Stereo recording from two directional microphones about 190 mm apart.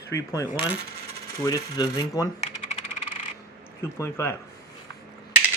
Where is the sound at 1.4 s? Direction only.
20° left (ahead or behind).